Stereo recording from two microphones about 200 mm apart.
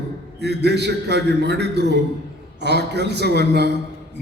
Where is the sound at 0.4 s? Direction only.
55° right (ahead or behind).